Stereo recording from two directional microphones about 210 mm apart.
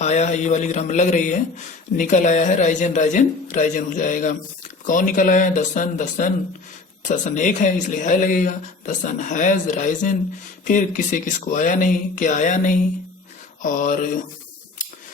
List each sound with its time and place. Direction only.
0.0 s a man's voice: 35° left (ahead or behind)